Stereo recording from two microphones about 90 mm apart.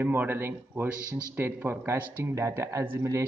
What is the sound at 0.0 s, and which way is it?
A man's voice, 25° right (ahead or behind).